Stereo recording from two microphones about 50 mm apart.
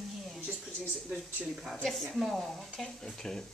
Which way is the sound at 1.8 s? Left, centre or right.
Centre.